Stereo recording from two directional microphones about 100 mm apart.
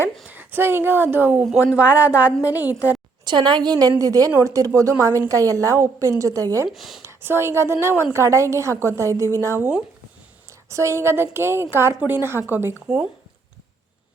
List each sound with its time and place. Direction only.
0.3 s speech: 20° right (ahead or behind)
3.2 s a woman's voice: 50° right (ahead or behind); by 6.7 s 35° right (ahead or behind)
6.7 s speech: centre (ahead or behind)
7.0 s a woman's voice: 25° right (ahead or behind)